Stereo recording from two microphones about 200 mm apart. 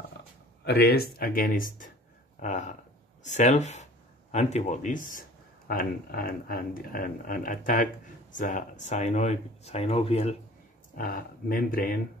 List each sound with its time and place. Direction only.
0.7 s speech: 55° left (ahead or behind); by 10.3 s 30° left (ahead or behind)
11.0 s speech: 45° left (ahead or behind)